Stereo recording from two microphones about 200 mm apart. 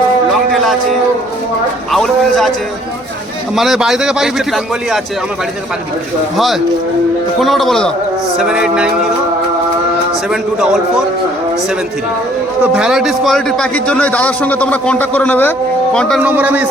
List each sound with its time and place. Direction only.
0.5 s a sound: centre (ahead or behind)
1.9 s a man's voice: centre (ahead or behind)
3.5 s a man's voice: centre (ahead or behind)
6.3 s a man's voice: centre (ahead or behind)
10.2 s a man's voice: 5° right (ahead or behind)
12.7 s a man's voice: 5° right (ahead or behind)
16.2 s a man's voice: 10° right (ahead or behind)